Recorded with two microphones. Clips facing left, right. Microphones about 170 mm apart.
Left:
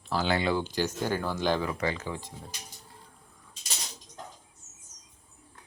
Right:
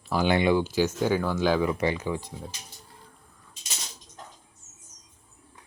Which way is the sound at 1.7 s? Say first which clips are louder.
Right 5 dB; 20° right (ahead or behind).